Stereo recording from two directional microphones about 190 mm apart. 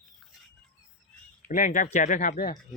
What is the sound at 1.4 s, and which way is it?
Speech, 45° left (ahead or behind).